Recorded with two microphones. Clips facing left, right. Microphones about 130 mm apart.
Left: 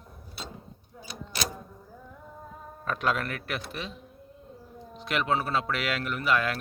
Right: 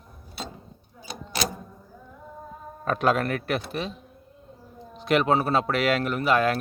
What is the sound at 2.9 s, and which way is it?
A man's voice, 40° right (ahead or behind).